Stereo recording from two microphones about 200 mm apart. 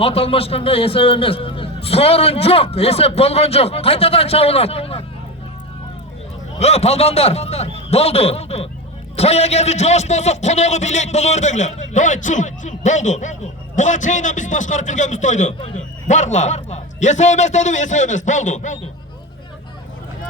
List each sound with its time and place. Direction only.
0.0 s a man's voice: 30° left (ahead or behind)
6.6 s a man's voice: 30° left (ahead or behind)